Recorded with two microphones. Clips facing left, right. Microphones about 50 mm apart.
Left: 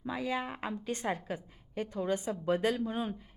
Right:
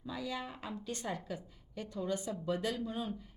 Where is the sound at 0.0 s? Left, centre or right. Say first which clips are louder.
Left 6 dB; left.